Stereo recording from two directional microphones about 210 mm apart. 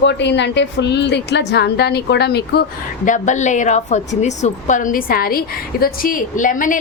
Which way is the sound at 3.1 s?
35° left (ahead or behind).